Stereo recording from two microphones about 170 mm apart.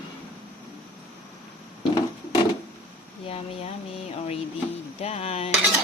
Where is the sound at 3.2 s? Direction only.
35° left (ahead or behind).